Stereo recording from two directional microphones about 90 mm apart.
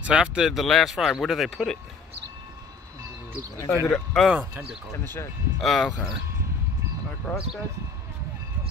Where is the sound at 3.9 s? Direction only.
5° left (ahead or behind).